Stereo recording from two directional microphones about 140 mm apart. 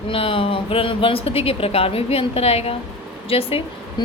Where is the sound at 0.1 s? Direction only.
40° left (ahead or behind).